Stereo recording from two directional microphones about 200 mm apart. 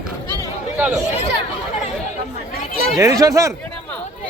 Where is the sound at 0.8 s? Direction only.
5° right (ahead or behind).